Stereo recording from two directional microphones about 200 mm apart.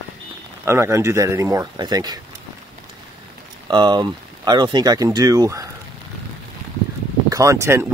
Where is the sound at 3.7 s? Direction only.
20° right (ahead or behind).